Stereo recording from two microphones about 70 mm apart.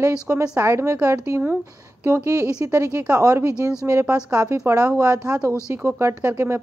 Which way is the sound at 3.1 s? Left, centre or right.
Right.